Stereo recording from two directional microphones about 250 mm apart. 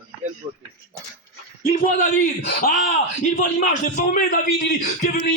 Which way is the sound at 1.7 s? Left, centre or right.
Left.